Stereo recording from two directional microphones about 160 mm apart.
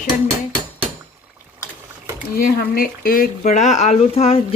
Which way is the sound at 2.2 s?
75° left (ahead or behind).